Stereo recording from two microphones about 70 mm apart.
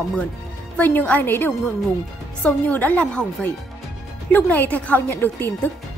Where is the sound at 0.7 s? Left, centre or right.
Left.